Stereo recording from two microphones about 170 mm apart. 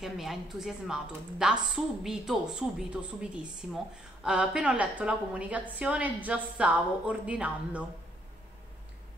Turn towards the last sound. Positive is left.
turn(degrees=-5)  # may be behind; listen again after turning